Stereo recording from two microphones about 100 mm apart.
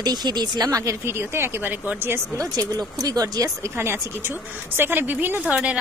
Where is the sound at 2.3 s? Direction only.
35° right (ahead or behind).